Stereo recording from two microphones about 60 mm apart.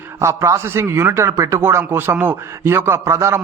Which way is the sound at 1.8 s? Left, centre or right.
Right.